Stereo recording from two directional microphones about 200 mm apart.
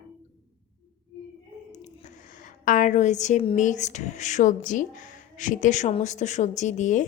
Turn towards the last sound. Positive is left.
turn(degrees=40)  # may be behind; listen again after turning